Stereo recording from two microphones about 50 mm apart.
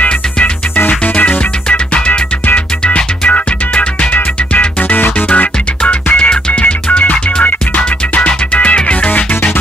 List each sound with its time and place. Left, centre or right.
0.7 s music: left
5.8 s music: left
9.1 s music: left